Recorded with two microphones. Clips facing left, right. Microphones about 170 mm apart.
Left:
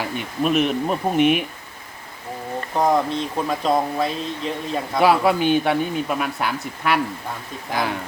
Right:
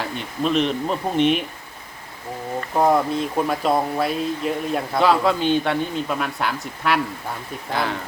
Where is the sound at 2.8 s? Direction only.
5° right (ahead or behind).